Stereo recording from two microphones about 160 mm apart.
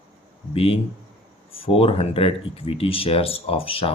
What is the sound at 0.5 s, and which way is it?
Speech, 35° left (ahead or behind).